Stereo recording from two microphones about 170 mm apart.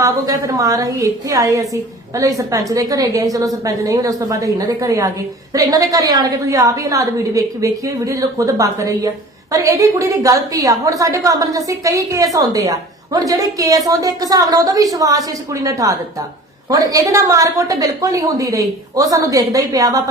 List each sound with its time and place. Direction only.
0.0 s a woman's voice: 20° right (ahead or behind)